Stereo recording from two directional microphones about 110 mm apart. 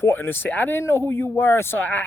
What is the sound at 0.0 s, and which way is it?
Speech, 20° left (ahead or behind).